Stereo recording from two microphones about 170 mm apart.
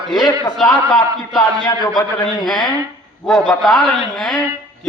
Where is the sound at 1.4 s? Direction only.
25° left (ahead or behind).